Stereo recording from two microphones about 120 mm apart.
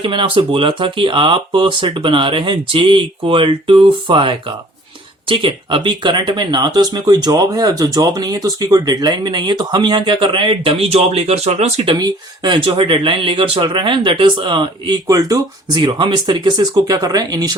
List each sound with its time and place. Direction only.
0.0 s speech: 45° right (ahead or behind); by 11.9 s 60° right (ahead or behind)
11.9 s speech: 35° right (ahead or behind)